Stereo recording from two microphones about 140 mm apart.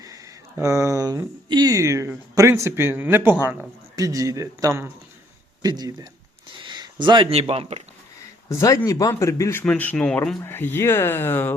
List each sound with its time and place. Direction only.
0.0 s a man's voice: 20° right (ahead or behind); by 7.8 s 45° right (ahead or behind)
8.4 s speech: 20° left (ahead or behind)